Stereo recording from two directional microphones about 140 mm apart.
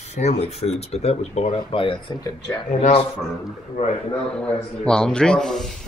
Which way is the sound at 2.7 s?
50° left (ahead or behind).